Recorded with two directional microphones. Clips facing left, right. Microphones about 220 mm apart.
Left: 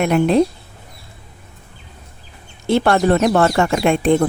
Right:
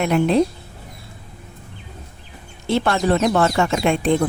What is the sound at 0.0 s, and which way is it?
Speech, 50° left (ahead or behind).